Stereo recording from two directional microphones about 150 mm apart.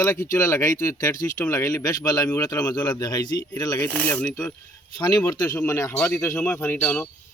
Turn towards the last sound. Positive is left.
turn(degrees=10)  # may be behind; listen again after turning